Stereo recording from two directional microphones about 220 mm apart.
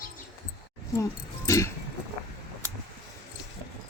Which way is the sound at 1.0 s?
15° left (ahead or behind).